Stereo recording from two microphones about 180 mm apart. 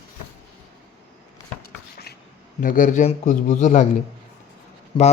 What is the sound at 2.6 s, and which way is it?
A man's voice, 50° left (ahead or behind).